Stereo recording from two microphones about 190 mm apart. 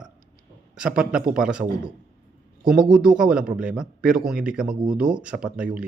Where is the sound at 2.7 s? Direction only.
5° right (ahead or behind).